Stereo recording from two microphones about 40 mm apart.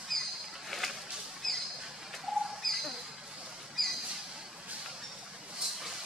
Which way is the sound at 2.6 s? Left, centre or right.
Centre.